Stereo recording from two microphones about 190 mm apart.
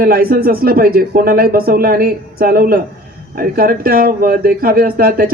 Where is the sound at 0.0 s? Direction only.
50° right (ahead or behind).